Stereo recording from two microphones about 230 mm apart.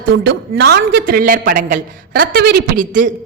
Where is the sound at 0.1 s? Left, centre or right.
Right.